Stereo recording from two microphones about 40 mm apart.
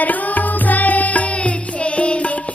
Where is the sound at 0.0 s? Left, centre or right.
Left.